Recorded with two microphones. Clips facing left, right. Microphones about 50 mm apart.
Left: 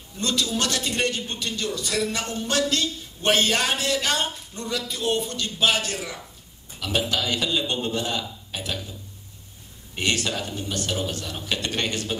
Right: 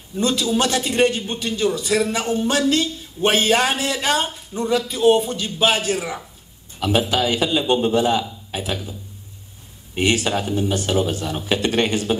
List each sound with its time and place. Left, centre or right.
0.2 s a man's voice: centre
9.9 s speech: centre